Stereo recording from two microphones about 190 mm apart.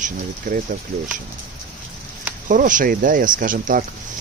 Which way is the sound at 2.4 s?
45° right (ahead or behind).